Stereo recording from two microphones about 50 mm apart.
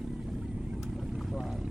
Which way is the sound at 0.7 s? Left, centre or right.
Centre.